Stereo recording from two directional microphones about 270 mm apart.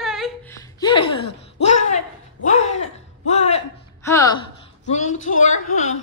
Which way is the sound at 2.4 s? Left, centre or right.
Left.